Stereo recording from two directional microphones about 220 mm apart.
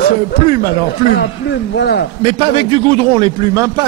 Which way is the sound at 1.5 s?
50° left (ahead or behind).